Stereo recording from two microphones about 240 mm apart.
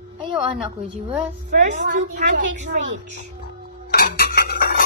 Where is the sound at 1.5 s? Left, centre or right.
Right.